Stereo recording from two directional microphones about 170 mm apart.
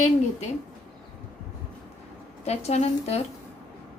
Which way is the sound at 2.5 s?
40° left (ahead or behind).